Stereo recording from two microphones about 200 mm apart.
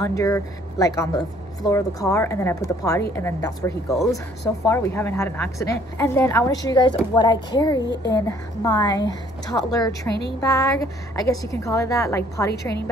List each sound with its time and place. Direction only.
0.0 s speech: 15° left (ahead or behind)
7.8 s a child's voice: 60° left (ahead or behind)
8.1 s speech: 20° left (ahead or behind)